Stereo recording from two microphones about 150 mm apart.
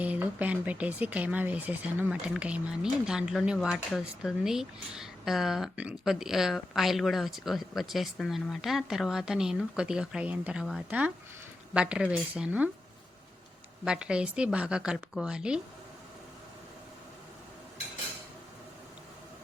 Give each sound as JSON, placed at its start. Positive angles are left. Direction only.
{"t": 0.0, "sound": "speech", "side_deg": -10}
{"t": 13.8, "sound": "speech", "side_deg": -5}